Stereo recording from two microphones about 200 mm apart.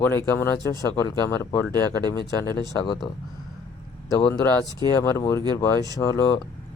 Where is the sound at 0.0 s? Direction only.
10° left (ahead or behind).